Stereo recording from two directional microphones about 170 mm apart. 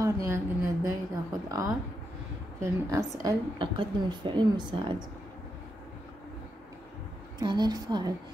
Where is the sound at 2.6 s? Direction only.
20° right (ahead or behind).